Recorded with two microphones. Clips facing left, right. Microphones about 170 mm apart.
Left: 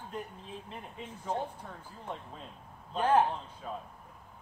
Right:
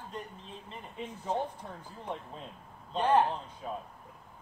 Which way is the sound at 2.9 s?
5° left (ahead or behind).